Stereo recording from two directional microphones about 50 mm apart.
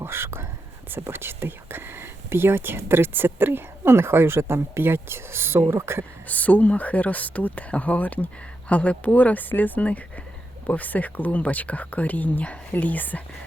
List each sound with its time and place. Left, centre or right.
0.0 s whispering: right
0.9 s speech: right
6.2 s speech: left